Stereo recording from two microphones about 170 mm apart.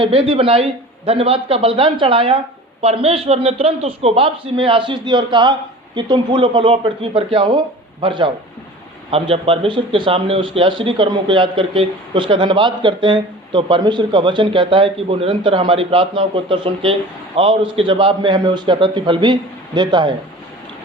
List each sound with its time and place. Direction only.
0.0 s a man's voice: 35° right (ahead or behind)